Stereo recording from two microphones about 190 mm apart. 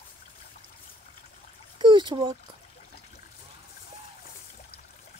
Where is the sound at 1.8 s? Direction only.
25° right (ahead or behind).